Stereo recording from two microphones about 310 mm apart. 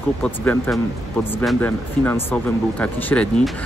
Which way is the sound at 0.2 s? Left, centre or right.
Centre.